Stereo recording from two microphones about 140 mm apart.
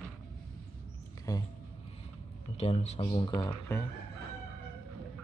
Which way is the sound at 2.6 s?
50° left (ahead or behind).